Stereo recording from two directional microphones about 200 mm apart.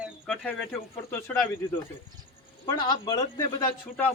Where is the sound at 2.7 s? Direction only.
20° left (ahead or behind).